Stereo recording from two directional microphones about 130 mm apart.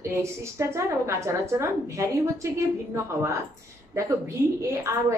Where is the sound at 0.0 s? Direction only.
20° right (ahead or behind).